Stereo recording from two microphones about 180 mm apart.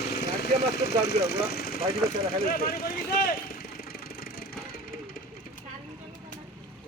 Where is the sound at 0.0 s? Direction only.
65° left (ahead or behind).